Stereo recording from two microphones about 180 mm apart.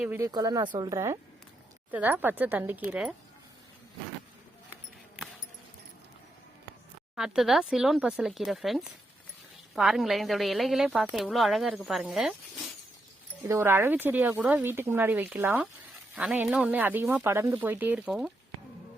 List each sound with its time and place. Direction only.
0.0 s a woman's voice: 10° right (ahead or behind)
0.3 s a woman's voice: 20° right (ahead or behind); by 3.2 s 5° right (ahead or behind)
7.2 s a woman's voice: 5° right (ahead or behind)
13.4 s a woman's voice: 15° right (ahead or behind)